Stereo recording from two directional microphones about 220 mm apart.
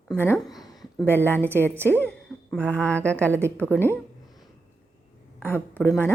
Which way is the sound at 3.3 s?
10° right (ahead or behind).